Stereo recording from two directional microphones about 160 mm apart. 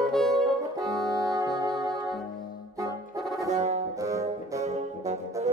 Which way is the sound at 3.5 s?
45° right (ahead or behind).